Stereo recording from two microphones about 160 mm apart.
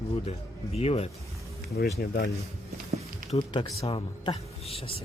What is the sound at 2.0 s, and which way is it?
Speech, 70° left (ahead or behind).